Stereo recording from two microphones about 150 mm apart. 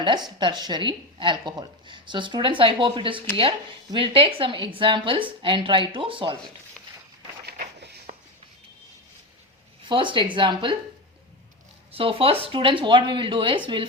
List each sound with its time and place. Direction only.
0.0 s a woman's voice: 30° right (ahead or behind)
9.9 s a woman's voice: 35° right (ahead or behind)
11.9 s a woman's voice: 40° right (ahead or behind)